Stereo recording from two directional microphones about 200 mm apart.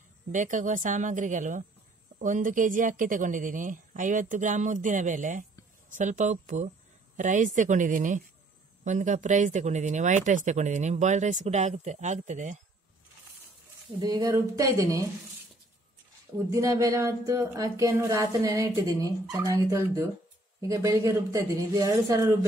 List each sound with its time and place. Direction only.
0.3 s speech: 40° right (ahead or behind)
14.0 s speech: 20° right (ahead or behind)
16.4 s speech: 15° right (ahead or behind)